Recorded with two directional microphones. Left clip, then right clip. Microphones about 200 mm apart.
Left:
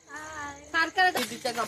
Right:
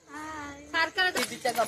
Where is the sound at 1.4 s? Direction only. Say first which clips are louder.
Right 3 dB; 30° left (ahead or behind).